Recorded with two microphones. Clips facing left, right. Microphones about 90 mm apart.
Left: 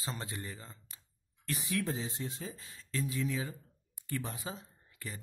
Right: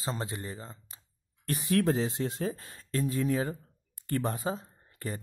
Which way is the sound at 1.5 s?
50° right (ahead or behind).